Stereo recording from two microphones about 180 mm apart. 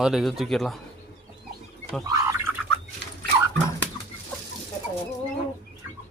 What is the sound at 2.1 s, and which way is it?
Gargling, 15° right (ahead or behind).